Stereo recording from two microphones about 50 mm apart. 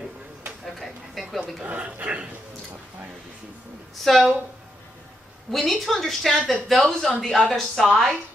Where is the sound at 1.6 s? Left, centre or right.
Right.